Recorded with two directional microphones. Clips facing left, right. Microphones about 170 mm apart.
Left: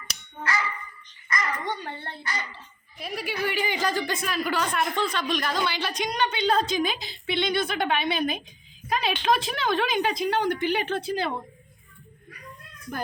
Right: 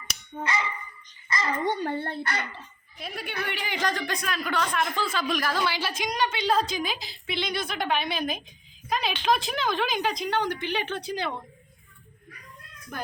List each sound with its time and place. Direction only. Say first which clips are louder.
0.0 s finger snapping: right 1 dB; 20° right (ahead or behind)
1.3 s a child's voice: right 2 dB; 25° right (ahead or behind)
1.8 s speech: right 7 dB; 45° right (ahead or behind)
3.0 s a woman's voice: left 4 dB; centre (ahead or behind)